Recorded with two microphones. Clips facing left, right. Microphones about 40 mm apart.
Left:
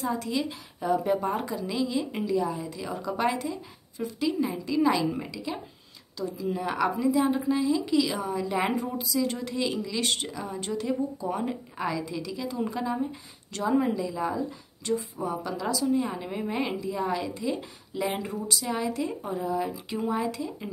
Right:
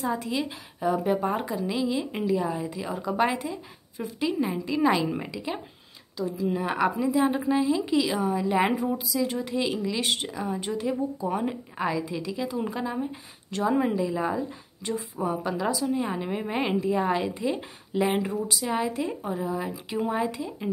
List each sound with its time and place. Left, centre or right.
0.0 s a woman's voice: centre
6.1 s a woman's voice: centre
8.9 s a woman's voice: centre; by 18.2 s right
18.2 s a woman's voice: centre